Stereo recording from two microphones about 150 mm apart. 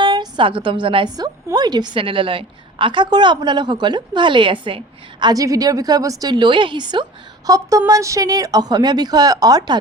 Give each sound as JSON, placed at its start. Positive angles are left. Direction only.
{"t": 0.0, "sound": "a woman's voice", "side_deg": -30}
{"t": 5.2, "sound": "speech", "side_deg": -25}